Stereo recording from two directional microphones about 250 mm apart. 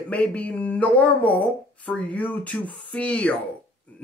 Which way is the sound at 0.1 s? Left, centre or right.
Centre.